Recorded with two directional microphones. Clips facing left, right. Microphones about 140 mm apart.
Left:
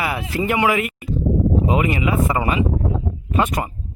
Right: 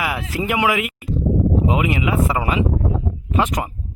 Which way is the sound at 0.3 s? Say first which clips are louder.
Left 1 dB; 5° right (ahead or behind).